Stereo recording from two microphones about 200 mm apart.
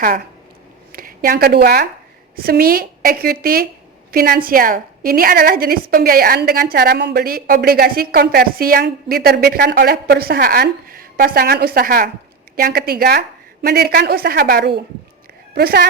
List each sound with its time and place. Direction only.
0.9 s a woman's voice: 45° right (ahead or behind)